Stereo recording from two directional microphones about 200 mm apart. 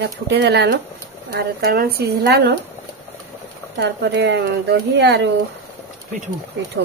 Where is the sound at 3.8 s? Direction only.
55° right (ahead or behind).